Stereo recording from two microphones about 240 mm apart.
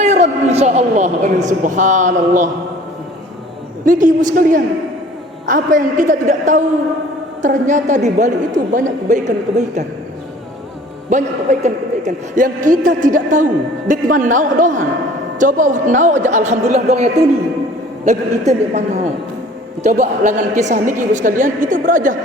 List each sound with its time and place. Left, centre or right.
0.0 s a woman's voice: right
3.8 s a woman's voice: right
11.1 s a woman's voice: right